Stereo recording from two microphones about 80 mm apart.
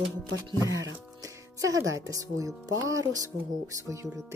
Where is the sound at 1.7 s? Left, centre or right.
Right.